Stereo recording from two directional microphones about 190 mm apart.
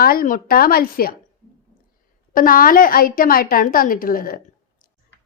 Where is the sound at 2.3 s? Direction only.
45° left (ahead or behind).